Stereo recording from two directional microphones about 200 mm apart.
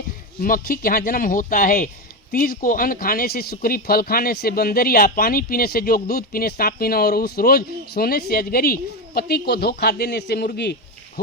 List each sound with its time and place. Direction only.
0.3 s speech: 45° left (ahead or behind)